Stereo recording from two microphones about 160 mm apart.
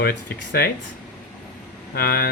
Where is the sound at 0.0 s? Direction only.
90° left.